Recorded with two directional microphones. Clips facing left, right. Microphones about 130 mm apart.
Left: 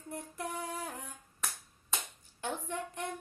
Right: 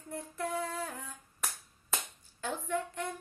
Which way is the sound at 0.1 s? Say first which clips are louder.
Right 4 dB; 15° left (ahead or behind).